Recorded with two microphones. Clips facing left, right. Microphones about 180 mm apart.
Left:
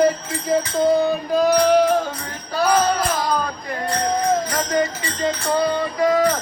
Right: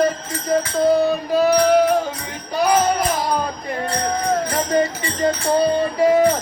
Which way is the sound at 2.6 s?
20° right (ahead or behind).